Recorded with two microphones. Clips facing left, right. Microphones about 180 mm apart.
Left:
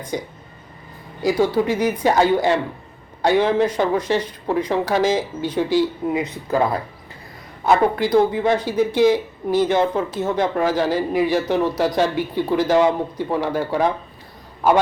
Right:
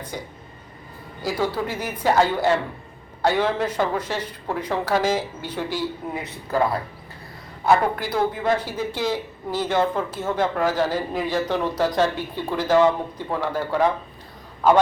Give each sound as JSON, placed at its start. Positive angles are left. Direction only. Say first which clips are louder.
{"t": 0.1, "sound": "speech", "louder": "left 7 dB", "side_deg": 20}
{"t": 7.6, "sound": "speech", "louder": "left 3 dB", "side_deg": 20}